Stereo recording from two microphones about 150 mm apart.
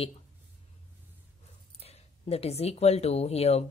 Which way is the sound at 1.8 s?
45° left (ahead or behind).